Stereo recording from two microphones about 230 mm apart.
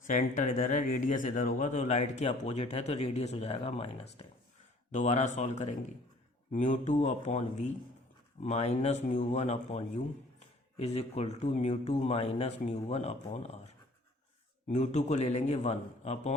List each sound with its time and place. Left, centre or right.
0.1 s speech: left